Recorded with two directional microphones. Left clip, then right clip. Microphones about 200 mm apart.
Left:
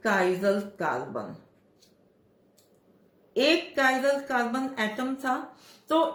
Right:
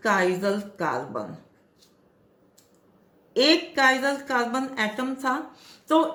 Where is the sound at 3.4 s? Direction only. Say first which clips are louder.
Right 3 dB; 25° right (ahead or behind).